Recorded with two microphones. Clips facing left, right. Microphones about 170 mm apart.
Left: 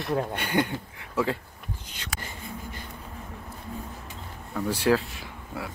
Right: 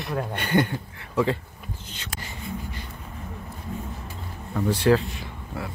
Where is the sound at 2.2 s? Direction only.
50° left (ahead or behind).